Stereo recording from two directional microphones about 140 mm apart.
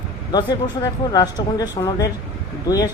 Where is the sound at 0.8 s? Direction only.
25° left (ahead or behind).